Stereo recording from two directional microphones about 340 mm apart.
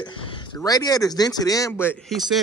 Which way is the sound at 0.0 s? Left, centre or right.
Centre.